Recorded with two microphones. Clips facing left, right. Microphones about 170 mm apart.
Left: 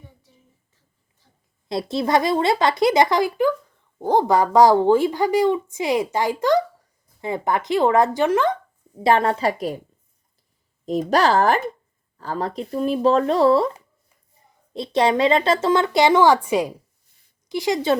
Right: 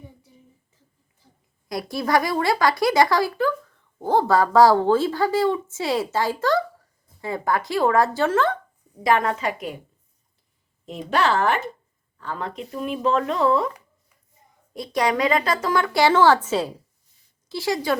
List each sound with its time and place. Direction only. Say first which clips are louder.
1.6 s a woman's voice: left 3 dB; 25° left (ahead or behind)
9.0 s speech: left 3 dB; 30° left (ahead or behind)
10.8 s a woman's voice: left 4 dB; 40° left (ahead or behind); by 17.9 s 20° left (ahead or behind)